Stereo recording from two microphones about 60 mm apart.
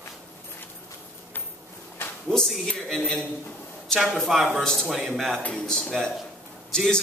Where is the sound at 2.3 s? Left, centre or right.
Centre.